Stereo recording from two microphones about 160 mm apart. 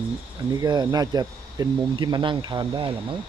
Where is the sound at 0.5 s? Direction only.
25° right (ahead or behind).